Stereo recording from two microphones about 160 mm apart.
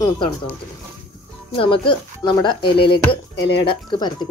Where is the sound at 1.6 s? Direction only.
30° left (ahead or behind).